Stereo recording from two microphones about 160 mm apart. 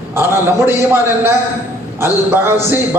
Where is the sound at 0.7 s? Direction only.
15° right (ahead or behind).